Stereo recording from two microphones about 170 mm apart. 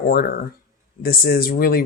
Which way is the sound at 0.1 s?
60° left (ahead or behind).